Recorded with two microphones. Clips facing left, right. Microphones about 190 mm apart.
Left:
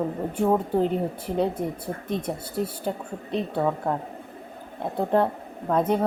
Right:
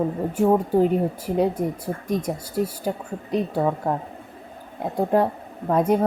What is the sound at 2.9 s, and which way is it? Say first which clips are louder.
Speech: right 3 dB; 5° right (ahead or behind).